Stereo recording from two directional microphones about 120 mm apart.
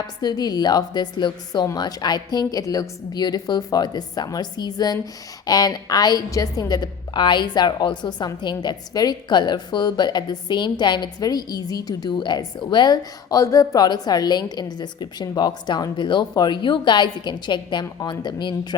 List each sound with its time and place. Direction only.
0.2 s a woman's voice: 35° left (ahead or behind)